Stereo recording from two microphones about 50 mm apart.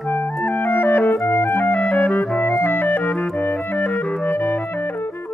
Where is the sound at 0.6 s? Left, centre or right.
Left.